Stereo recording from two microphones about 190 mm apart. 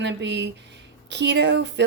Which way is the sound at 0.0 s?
70° right (ahead or behind).